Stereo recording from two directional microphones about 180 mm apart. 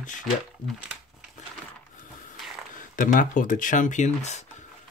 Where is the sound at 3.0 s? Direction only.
50° left (ahead or behind).